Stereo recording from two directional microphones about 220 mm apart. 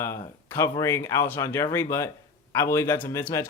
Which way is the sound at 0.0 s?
10° left (ahead or behind).